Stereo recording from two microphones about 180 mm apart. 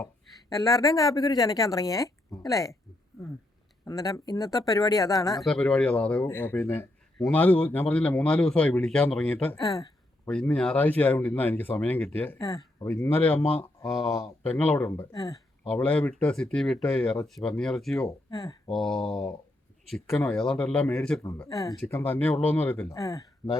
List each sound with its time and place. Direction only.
0.5 s a woman's voice: 20° left (ahead or behind)
3.8 s a woman's voice: 20° left (ahead or behind)
5.4 s a man's voice: 5° left (ahead or behind); by 9.9 s 20° left (ahead or behind)
10.2 s a man's voice: 5° left (ahead or behind)
15.1 s a woman's voice: 20° left (ahead or behind)
15.7 s a man's voice: 5° left (ahead or behind)
18.3 s speech: 20° left (ahead or behind)
18.7 s a man's voice: centre (ahead or behind); by 23.2 s 20° left (ahead or behind)